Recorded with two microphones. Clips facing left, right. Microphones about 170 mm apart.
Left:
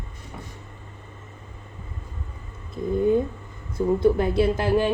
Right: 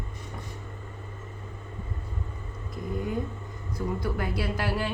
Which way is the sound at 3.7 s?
25° left (ahead or behind).